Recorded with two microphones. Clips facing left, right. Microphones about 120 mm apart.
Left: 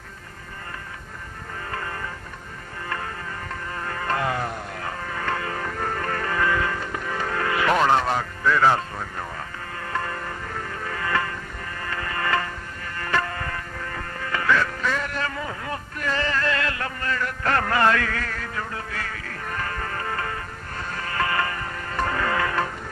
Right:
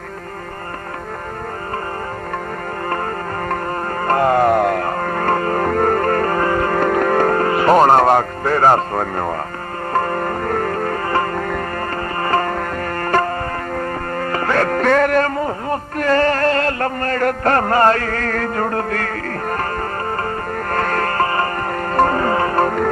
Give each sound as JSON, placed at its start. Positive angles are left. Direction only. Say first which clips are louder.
{"t": 4.0, "sound": "music", "louder": "right 12 dB", "side_deg": -50}
{"t": 6.7, "sound": "music", "louder": "right 14 dB", "side_deg": -65}
{"t": 11.3, "sound": "music", "louder": "right 16 dB", "side_deg": -70}
{"t": 11.9, "sound": "music", "louder": "right 4 dB", "side_deg": -45}
{"t": 12.5, "sound": "music", "louder": "right 14 dB", "side_deg": -60}
{"t": 20.7, "sound": "music", "louder": "right 14 dB", "side_deg": -65}
{"t": 21.2, "sound": "music", "louder": "right 7 dB", "side_deg": -40}
{"t": 22.6, "sound": "music", "louder": "right 14 dB", "side_deg": -65}